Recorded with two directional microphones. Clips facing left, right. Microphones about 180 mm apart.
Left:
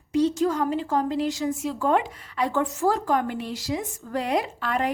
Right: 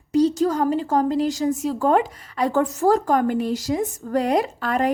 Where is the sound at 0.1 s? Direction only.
40° right (ahead or behind).